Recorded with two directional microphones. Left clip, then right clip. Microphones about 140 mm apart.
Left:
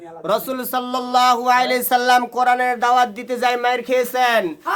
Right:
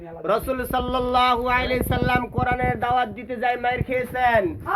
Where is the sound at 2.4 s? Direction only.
30° left (ahead or behind).